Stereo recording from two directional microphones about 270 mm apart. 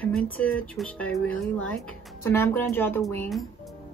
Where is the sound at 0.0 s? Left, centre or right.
Centre.